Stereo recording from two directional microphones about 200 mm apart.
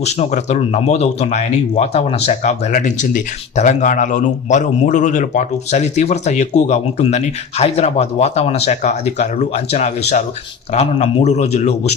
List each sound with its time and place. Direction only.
0.0 s speech: 35° left (ahead or behind)